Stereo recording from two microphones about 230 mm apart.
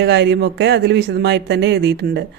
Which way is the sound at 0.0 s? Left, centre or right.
Right.